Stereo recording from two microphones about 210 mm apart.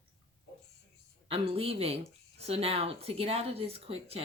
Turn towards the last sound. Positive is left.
turn(degrees=-30)  # may be behind; listen again after turning